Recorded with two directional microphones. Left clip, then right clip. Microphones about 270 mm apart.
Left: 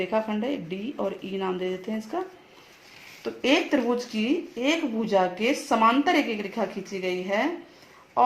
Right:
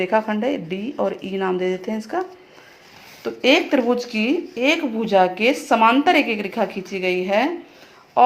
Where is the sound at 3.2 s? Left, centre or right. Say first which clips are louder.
Right 7 dB; centre.